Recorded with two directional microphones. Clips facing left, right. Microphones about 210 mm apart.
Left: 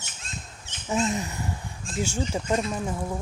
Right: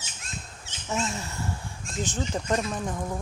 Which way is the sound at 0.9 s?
15° left (ahead or behind).